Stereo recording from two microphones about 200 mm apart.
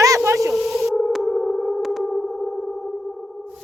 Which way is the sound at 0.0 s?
15° right (ahead or behind).